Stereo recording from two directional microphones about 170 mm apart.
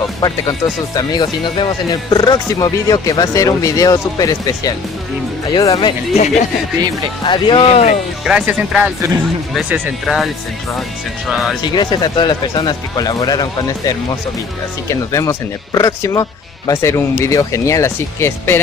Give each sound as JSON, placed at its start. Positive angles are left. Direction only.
{"t": 0.9, "sound": "speech", "side_deg": 25}
{"t": 7.2, "sound": "speech", "side_deg": 30}
{"t": 8.3, "sound": "speech", "side_deg": -5}
{"t": 11.6, "sound": "speech", "side_deg": 25}